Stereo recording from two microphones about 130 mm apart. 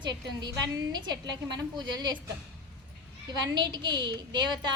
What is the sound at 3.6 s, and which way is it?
A woman's voice, 35° right (ahead or behind).